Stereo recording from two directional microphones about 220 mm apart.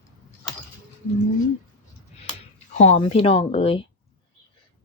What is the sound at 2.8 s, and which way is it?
Speech, 30° left (ahead or behind).